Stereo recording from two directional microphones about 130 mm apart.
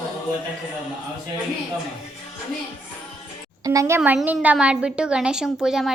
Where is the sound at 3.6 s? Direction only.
25° right (ahead or behind).